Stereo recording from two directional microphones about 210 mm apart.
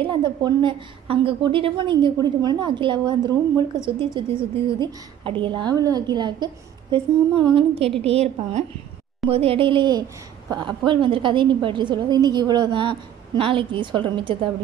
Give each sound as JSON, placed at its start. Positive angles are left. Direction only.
{"t": 0.0, "sound": "a woman's voice", "side_deg": -20}